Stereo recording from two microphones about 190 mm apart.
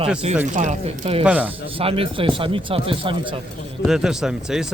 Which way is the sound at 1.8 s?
30° right (ahead or behind).